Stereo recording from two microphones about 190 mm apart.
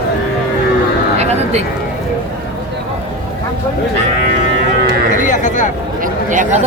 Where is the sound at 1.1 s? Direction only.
35° right (ahead or behind).